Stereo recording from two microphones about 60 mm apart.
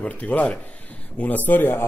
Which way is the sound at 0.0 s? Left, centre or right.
Left.